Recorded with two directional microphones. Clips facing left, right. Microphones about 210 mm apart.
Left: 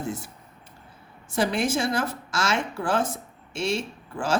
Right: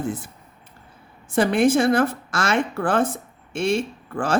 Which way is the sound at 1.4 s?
55° right (ahead or behind).